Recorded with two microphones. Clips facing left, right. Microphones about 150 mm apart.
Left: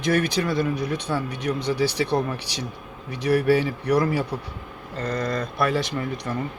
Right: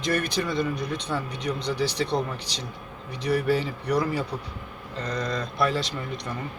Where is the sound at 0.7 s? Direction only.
55° left (ahead or behind).